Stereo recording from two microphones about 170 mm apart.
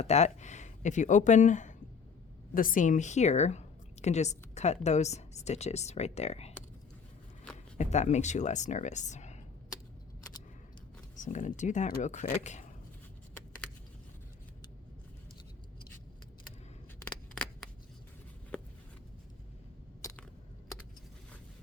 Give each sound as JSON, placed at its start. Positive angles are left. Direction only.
{"t": 0.0, "sound": "a woman's voice", "side_deg": 40}
{"t": 7.8, "sound": "speech", "side_deg": 40}
{"t": 11.2, "sound": "speech", "side_deg": 45}
{"t": 17.0, "sound": "scissors", "side_deg": 5}
{"t": 18.5, "sound": "a sound", "side_deg": 5}